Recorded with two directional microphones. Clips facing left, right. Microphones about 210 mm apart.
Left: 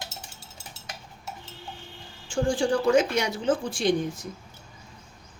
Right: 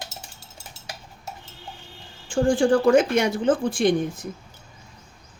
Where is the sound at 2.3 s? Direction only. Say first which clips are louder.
Right 5 dB; 55° right (ahead or behind).